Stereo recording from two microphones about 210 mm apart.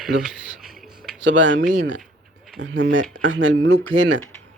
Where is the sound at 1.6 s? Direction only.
40° right (ahead or behind).